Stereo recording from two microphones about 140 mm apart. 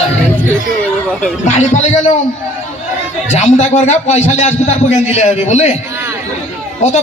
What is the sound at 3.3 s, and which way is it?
A man's voice, 55° left (ahead or behind).